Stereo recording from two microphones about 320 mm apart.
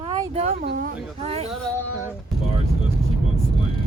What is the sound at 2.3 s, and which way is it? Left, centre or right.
Speech, centre.